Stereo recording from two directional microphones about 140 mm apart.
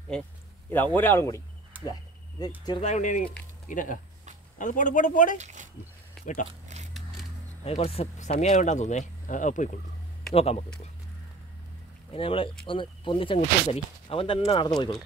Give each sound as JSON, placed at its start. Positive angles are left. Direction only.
{"t": 0.9, "sound": "speech", "side_deg": 15}
{"t": 2.8, "sound": "speech", "side_deg": 60}
{"t": 5.4, "sound": "speech", "side_deg": -60}
{"t": 6.2, "sound": "a sound", "side_deg": 0}
{"t": 7.6, "sound": "speech", "side_deg": 45}
{"t": 10.3, "sound": "speech", "side_deg": 45}
{"t": 12.1, "sound": "speech", "side_deg": 40}